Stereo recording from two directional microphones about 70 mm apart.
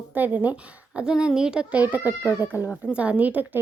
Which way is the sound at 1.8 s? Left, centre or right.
Right.